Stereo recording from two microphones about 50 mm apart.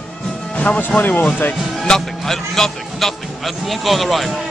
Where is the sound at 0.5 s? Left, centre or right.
Left.